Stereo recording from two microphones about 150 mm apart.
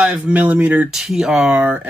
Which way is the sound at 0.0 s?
10° right (ahead or behind).